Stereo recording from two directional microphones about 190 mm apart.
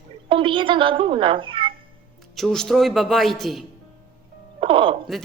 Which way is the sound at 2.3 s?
Centre (ahead or behind).